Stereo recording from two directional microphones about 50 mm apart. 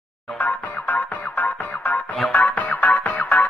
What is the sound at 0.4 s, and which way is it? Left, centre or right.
Music, left.